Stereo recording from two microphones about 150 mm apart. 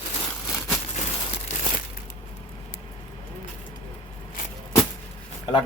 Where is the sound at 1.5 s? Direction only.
60° left (ahead or behind).